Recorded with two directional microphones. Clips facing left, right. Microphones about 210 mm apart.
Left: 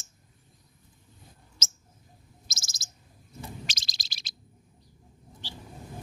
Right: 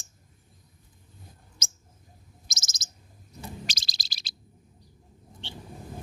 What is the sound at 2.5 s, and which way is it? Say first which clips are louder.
Bird: right 2 dB; 20° right (ahead or behind).